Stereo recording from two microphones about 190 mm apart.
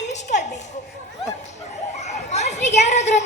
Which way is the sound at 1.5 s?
35° left (ahead or behind).